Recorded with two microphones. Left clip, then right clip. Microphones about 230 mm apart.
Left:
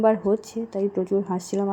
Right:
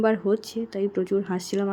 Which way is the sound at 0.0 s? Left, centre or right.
Right.